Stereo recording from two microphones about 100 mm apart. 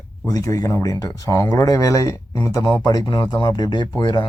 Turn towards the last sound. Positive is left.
turn(degrees=50)  # may be behind; listen again after turning